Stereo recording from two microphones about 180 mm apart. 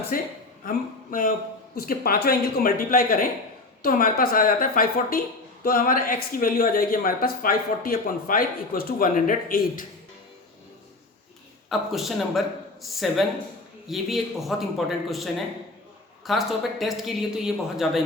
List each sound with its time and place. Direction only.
0.1 s a man's voice: 50° left (ahead or behind)
11.7 s speech: centre (ahead or behind)